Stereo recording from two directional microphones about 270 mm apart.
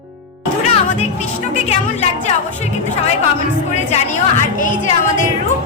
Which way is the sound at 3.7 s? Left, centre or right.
Left.